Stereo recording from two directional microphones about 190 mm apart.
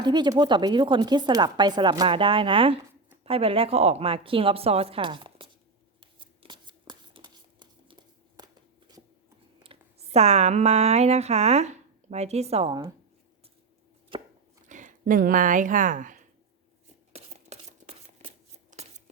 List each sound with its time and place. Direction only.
0.0 s speech: 20° right (ahead or behind)
6.0 s a sound: 25° right (ahead or behind)
9.6 s speech: 35° right (ahead or behind)
14.1 s chopping: 25° right (ahead or behind)
14.7 s speech: 40° right (ahead or behind)
17.2 s a sound: 35° right (ahead or behind)